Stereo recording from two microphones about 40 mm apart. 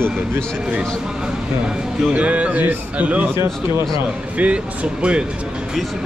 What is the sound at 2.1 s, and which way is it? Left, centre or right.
Speech, right.